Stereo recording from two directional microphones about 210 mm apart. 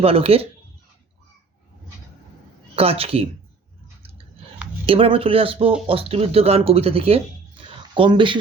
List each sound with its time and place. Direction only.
0.0 s speech: 30° right (ahead or behind)
2.7 s speech: 25° right (ahead or behind)
4.9 s speech: 25° right (ahead or behind)